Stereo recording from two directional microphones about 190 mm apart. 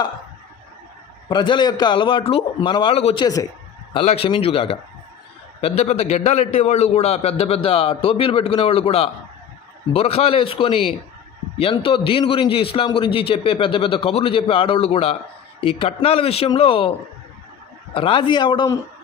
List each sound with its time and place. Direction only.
1.3 s a man's voice: 25° left (ahead or behind)
17.9 s a man's voice: 30° left (ahead or behind)